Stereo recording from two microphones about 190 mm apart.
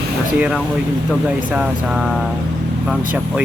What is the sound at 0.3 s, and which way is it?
Speech, 5° right (ahead or behind).